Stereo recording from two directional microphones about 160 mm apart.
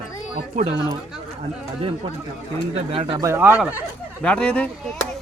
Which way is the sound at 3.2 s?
15° right (ahead or behind).